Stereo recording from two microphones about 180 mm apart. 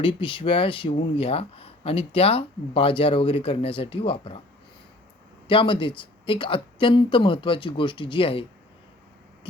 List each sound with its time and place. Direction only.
0.0 s speech: 30° left (ahead or behind)
5.5 s speech: 25° left (ahead or behind)